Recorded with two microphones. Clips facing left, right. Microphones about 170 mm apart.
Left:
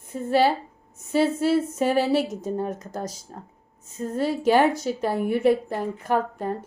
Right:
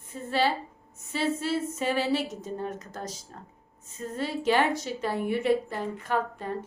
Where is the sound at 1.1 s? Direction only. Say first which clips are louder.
Left 7 dB; 10° left (ahead or behind).